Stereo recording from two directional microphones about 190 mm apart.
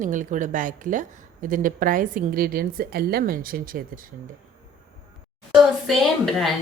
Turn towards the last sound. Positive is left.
turn(degrees=0)  # may be behind; listen again after turning